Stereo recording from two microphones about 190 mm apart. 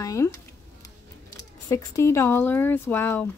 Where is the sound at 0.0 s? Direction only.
15° left (ahead or behind).